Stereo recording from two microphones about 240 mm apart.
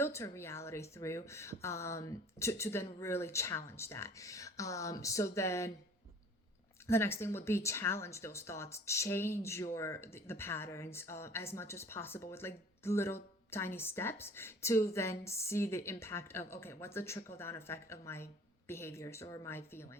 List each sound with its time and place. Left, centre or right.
0.0 s speech: centre
6.8 s speech: centre